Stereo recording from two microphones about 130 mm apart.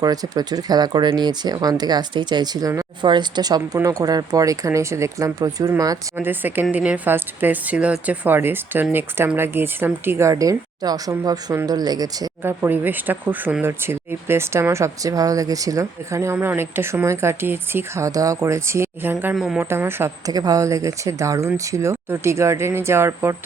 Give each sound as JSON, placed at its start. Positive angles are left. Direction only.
{"t": 0.0, "sound": "speech", "side_deg": -30}
{"t": 6.1, "sound": "a woman's voice", "side_deg": -15}
{"t": 12.4, "sound": "speech", "side_deg": -15}
{"t": 19.2, "sound": "speech", "side_deg": -5}
{"t": 19.5, "sound": "speech", "side_deg": -20}